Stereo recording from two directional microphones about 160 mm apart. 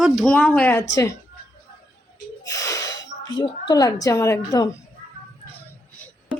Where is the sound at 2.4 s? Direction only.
20° left (ahead or behind).